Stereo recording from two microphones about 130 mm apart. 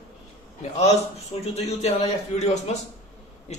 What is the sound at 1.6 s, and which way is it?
Speech, 50° left (ahead or behind).